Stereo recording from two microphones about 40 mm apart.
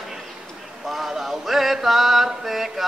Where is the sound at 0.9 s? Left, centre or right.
Centre.